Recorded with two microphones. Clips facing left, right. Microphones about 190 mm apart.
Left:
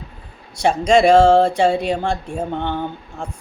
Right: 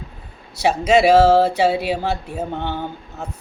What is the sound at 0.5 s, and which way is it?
Speech, 5° right (ahead or behind).